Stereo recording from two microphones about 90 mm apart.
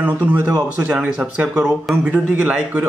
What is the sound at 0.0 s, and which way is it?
Speech, 15° right (ahead or behind).